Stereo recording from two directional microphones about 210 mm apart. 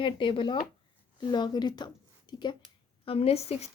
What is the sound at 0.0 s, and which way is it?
A woman's voice, 25° left (ahead or behind).